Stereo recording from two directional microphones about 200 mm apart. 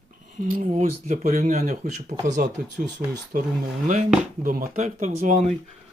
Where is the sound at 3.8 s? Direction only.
35° right (ahead or behind).